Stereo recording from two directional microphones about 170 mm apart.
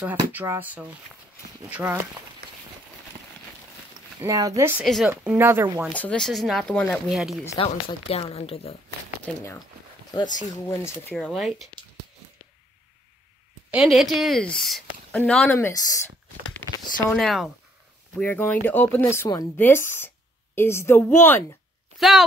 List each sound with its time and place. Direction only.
0.3 s speech: 10° right (ahead or behind)
4.2 s speech: 20° right (ahead or behind)
4.8 s speech: centre (ahead or behind)
5.1 s speech: 10° right (ahead or behind)
5.9 s speech: 5° left (ahead or behind)
7.5 s speech: 35° left (ahead or behind)
9.2 s speech: 15° left (ahead or behind)
11.1 s speech: centre (ahead or behind)
13.7 s speech: centre (ahead or behind); by 16.1 s 20° left (ahead or behind)
17.1 s speech: centre (ahead or behind)
21.9 s a sound: centre (ahead or behind)